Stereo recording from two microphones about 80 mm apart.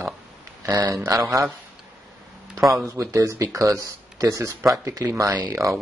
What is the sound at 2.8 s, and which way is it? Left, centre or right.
Speech, right.